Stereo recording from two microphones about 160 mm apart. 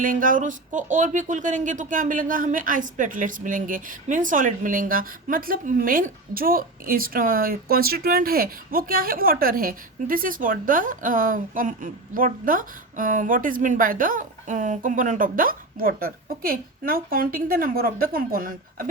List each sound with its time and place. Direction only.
0.0 s speech: 55° right (ahead or behind)